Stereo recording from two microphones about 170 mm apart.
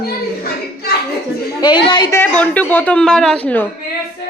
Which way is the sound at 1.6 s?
25° left (ahead or behind).